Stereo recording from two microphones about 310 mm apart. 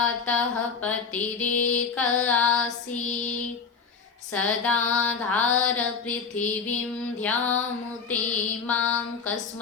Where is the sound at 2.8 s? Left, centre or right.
Left.